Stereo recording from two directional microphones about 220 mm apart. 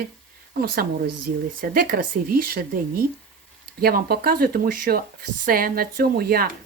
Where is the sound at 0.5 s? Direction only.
45° right (ahead or behind).